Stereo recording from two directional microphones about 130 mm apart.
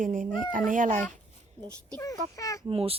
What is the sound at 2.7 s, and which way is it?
Speech, 50° right (ahead or behind).